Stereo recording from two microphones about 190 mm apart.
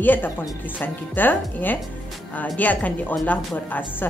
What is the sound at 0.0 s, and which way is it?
Speech, 10° left (ahead or behind).